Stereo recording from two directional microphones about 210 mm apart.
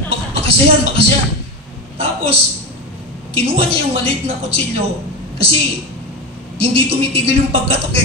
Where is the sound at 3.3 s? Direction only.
25° right (ahead or behind).